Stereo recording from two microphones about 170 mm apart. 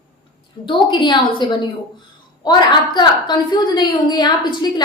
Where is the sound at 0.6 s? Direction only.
30° left (ahead or behind).